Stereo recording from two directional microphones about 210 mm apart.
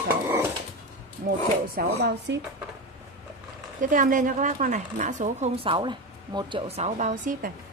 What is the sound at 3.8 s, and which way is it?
A woman's voice, 40° right (ahead or behind).